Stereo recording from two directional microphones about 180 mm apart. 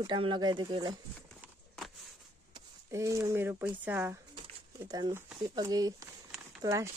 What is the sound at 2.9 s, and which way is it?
Speech, 15° right (ahead or behind).